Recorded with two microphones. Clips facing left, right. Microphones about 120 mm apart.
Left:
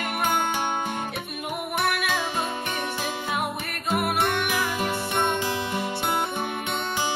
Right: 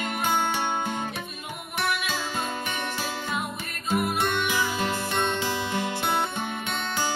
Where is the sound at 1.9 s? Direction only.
60° left (ahead or behind).